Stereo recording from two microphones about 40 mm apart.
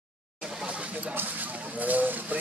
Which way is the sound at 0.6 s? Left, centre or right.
Right.